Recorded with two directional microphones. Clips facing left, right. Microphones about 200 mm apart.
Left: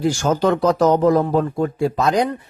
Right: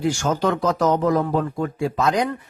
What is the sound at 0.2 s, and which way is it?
A man's voice, 35° left (ahead or behind).